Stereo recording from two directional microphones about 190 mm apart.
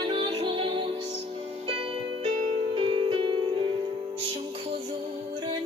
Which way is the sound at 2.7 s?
25° right (ahead or behind).